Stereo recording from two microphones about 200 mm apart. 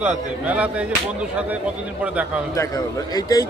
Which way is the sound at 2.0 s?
5° right (ahead or behind).